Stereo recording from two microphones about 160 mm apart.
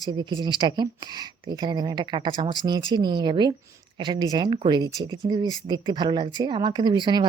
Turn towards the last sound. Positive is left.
turn(degrees=-30)  # may be behind; listen again after turning